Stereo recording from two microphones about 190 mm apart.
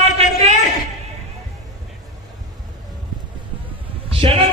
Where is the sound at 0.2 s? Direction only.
30° right (ahead or behind).